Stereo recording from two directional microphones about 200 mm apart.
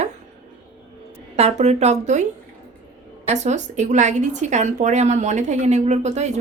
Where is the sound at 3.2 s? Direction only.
35° right (ahead or behind).